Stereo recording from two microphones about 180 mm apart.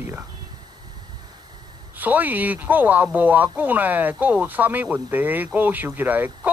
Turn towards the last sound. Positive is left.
turn(degrees=-10)  # may be behind; listen again after turning